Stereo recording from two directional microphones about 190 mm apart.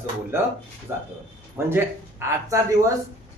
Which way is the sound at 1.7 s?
10° right (ahead or behind).